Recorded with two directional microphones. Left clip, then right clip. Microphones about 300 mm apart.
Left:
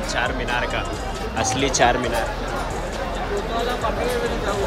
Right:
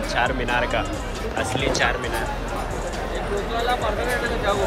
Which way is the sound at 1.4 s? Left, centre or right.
Centre.